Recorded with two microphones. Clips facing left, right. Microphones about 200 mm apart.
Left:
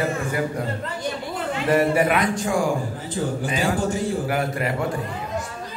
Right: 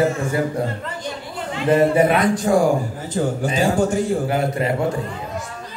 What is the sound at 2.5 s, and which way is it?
Speech, 35° right (ahead or behind).